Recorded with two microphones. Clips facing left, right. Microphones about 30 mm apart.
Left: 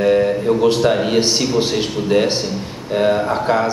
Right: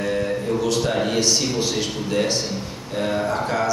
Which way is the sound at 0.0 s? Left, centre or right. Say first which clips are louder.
Left 8 dB; left.